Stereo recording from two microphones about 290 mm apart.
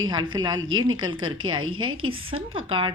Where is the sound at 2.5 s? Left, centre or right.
Centre.